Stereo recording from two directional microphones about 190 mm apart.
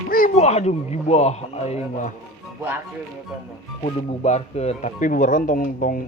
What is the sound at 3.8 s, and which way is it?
Speech, 35° left (ahead or behind).